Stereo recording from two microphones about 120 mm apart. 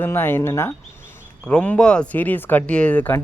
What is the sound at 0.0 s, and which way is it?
Speech, 20° left (ahead or behind).